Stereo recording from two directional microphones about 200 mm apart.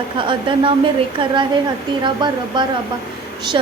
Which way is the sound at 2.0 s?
25° right (ahead or behind).